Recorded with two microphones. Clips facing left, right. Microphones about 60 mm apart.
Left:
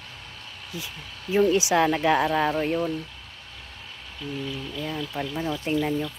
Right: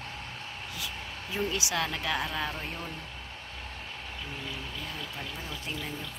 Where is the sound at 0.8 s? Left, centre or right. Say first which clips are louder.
Right 1 dB; left.